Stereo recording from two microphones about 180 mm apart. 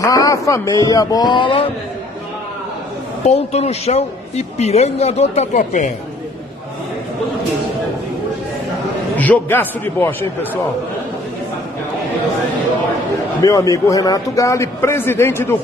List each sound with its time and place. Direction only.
0.0 s speech: 20° left (ahead or behind)
3.3 s a man's voice: 35° left (ahead or behind)
9.1 s a man's voice: 10° left (ahead or behind)
13.4 s a man's voice: 20° left (ahead or behind)